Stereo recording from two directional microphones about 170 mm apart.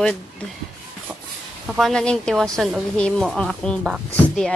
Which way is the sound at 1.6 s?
Centre (ahead or behind).